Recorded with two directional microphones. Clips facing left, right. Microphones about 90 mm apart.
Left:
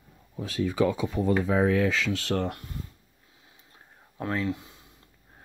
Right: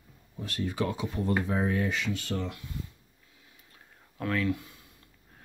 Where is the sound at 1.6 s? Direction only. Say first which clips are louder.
Left 5 dB; 90° left; by 2.7 s 55° left (ahead or behind).